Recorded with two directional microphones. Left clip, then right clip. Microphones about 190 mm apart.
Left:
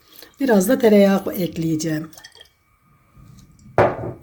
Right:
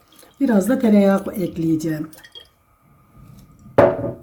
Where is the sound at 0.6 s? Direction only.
60° left (ahead or behind).